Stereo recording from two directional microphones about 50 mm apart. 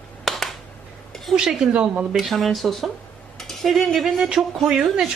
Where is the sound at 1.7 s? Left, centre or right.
Right.